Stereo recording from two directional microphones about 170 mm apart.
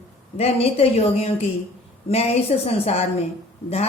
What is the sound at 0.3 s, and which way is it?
Speech, 35° left (ahead or behind).